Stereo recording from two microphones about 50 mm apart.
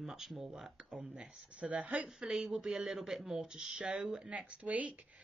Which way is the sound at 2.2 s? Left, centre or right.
Centre.